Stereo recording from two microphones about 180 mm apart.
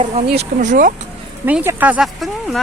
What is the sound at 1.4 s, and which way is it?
Speech, 10° right (ahead or behind).